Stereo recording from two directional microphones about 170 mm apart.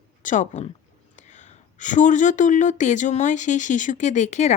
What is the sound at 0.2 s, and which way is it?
A woman's voice, 45° left (ahead or behind).